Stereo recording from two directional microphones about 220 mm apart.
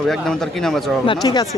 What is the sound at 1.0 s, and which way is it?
Speech, 20° left (ahead or behind).